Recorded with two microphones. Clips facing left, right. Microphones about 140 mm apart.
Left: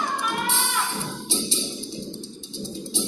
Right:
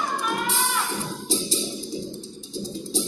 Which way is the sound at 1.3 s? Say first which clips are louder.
Right 3 dB; 40° right (ahead or behind).